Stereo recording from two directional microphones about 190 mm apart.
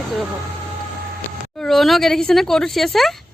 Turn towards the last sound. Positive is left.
turn(degrees=0)  # may be behind; listen again after turning